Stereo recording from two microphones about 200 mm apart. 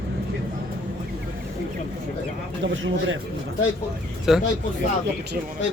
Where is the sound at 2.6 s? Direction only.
70° right (ahead or behind).